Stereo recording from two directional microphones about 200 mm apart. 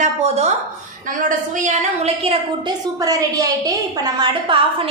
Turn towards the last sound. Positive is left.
turn(degrees=-25)  # may be behind; listen again after turning